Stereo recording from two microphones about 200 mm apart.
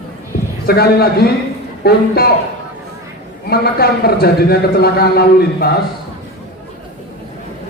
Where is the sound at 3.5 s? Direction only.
50° left (ahead or behind).